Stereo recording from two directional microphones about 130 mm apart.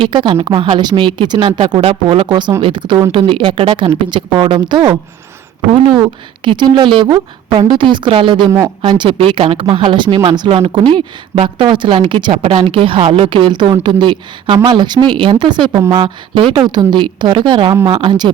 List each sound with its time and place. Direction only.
0.0 s a woman's voice: 40° right (ahead or behind)
2.6 s a woman's voice: 35° right (ahead or behind)
6.0 s a woman's voice: 35° right (ahead or behind)
8.4 s speech: 25° right (ahead or behind)
8.8 s a woman's voice: 40° right (ahead or behind)